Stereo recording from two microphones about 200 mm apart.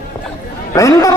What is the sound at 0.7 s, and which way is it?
Speech, 15° left (ahead or behind).